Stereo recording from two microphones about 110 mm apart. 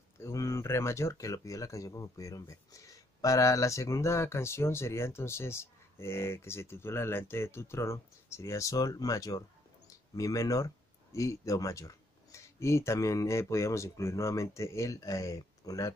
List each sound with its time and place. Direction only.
0.2 s speech: 25° left (ahead or behind)